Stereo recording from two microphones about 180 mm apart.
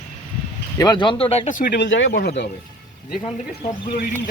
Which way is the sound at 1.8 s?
90° left.